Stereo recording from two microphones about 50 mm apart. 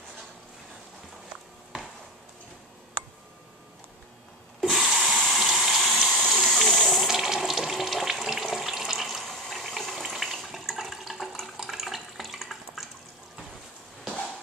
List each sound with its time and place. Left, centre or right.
4.6 s sink: centre
6.3 s hiss: centre
6.7 s water: centre